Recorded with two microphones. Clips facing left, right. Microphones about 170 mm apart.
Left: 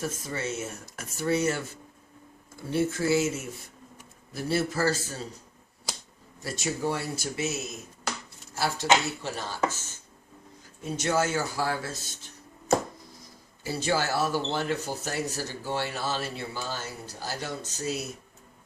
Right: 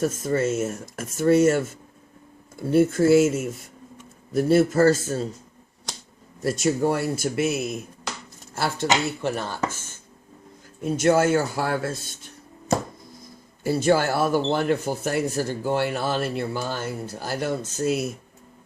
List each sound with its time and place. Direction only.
0.0 s speech: 50° right (ahead or behind)
2.7 s speech: 50° right (ahead or behind)
6.7 s speech: 60° right (ahead or behind)
10.8 s speech: 55° right (ahead or behind)
13.7 s speech: 55° right (ahead or behind)